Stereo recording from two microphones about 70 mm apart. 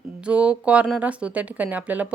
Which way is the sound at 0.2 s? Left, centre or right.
Centre.